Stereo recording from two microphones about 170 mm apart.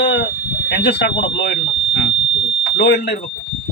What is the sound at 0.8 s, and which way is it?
Speech, 90° left.